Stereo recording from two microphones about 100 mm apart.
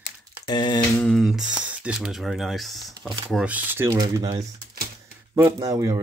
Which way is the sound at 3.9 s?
35° right (ahead or behind).